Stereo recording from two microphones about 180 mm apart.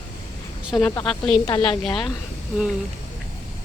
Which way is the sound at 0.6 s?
Centre (ahead or behind).